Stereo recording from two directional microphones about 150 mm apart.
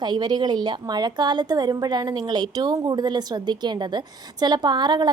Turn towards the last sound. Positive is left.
turn(degrees=-30)  # may be behind; listen again after turning